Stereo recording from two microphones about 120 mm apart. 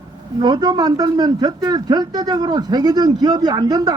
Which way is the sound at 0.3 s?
35° right (ahead or behind).